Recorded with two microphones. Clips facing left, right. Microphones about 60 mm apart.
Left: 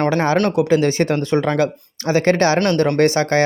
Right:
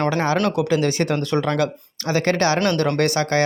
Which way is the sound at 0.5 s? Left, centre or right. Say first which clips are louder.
Left 4 dB; left.